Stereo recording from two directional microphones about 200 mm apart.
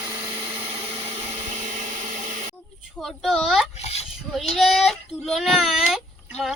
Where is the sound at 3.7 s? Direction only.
30° left (ahead or behind).